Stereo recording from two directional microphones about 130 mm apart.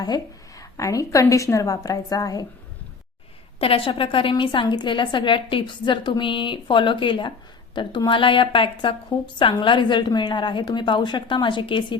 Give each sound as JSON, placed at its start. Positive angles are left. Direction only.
{"t": 0.0, "sound": "a woman's voice", "side_deg": 30}
{"t": 3.6, "sound": "a woman's voice", "side_deg": 45}